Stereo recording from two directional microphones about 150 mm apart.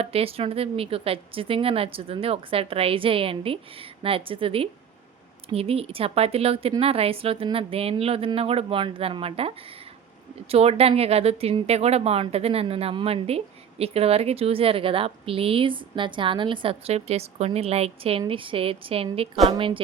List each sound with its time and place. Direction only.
0.0 s speech: 40° right (ahead or behind)
10.5 s speech: 40° right (ahead or behind)